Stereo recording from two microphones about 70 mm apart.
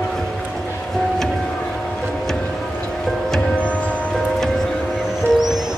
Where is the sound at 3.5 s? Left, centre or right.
Centre.